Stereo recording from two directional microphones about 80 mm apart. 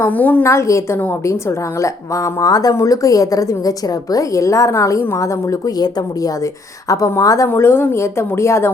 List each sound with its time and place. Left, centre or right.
0.0 s a woman's voice: left
0.4 s a woman's voice: left
7.4 s a woman's voice: left